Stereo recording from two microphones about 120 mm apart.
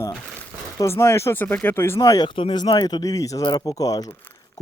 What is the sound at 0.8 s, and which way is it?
Speech, 20° left (ahead or behind).